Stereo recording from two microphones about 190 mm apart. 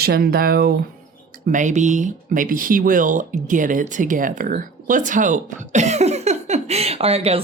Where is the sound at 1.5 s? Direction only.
40° right (ahead or behind).